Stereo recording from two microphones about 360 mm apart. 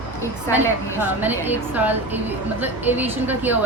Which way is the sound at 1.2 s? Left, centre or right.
Centre.